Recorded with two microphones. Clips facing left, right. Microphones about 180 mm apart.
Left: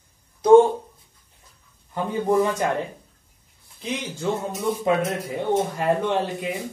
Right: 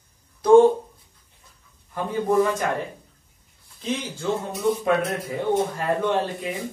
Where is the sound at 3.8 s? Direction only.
15° left (ahead or behind).